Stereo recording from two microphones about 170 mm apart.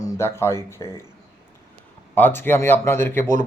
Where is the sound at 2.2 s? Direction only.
10° left (ahead or behind).